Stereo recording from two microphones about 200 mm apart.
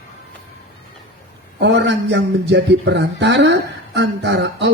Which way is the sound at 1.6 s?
60° right (ahead or behind).